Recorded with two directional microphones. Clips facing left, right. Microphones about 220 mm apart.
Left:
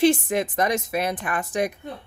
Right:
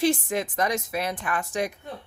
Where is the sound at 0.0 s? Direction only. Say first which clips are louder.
Left 4 dB; 20° left (ahead or behind).